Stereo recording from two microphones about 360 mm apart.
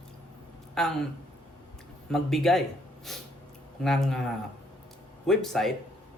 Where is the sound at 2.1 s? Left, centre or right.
Centre.